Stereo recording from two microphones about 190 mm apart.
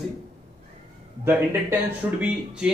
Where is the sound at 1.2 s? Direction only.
10° right (ahead or behind).